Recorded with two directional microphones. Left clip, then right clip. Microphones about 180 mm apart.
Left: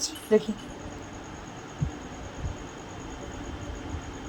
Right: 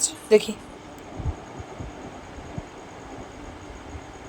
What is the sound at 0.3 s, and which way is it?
Speech, 70° right (ahead or behind).